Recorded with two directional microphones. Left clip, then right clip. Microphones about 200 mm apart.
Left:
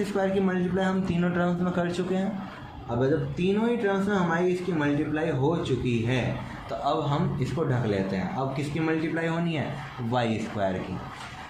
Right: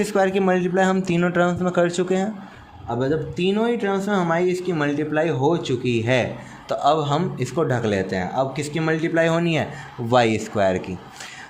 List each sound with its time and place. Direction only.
0.2 s speech: 55° right (ahead or behind)
3.0 s speech: 55° right (ahead or behind)
6.7 s speech: 50° right (ahead or behind)